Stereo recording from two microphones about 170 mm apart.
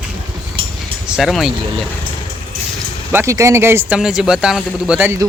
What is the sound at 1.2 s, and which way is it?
Speech, centre (ahead or behind).